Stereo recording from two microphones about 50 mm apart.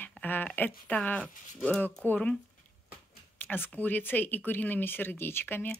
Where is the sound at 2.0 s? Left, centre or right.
Left.